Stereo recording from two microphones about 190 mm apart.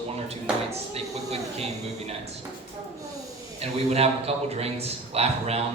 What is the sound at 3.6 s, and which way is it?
A man's voice, 35° right (ahead or behind).